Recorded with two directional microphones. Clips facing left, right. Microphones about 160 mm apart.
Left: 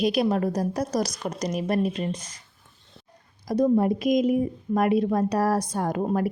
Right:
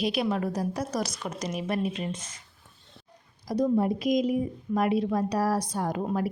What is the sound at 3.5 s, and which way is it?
A woman's voice, 50° left (ahead or behind).